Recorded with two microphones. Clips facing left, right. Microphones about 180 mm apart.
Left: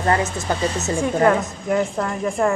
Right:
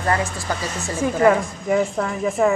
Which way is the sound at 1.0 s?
Centre (ahead or behind).